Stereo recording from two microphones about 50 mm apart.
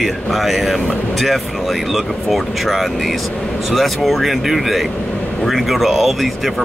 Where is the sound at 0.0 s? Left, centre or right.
Centre.